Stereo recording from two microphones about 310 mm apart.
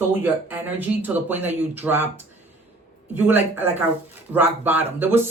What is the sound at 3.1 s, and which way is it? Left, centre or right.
Speech, centre.